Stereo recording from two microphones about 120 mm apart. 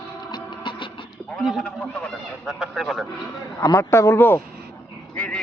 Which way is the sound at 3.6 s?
25° left (ahead or behind).